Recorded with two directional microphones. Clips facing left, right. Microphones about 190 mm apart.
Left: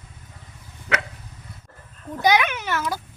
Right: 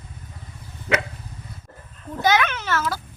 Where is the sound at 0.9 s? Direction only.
20° right (ahead or behind).